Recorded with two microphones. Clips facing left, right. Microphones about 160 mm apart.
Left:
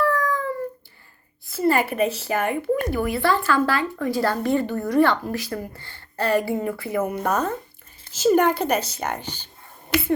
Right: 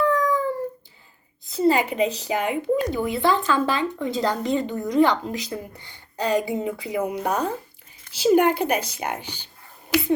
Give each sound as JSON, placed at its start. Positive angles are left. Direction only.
{"t": 0.0, "sound": "dog", "side_deg": -20}
{"t": 1.5, "sound": "a woman's voice", "side_deg": -20}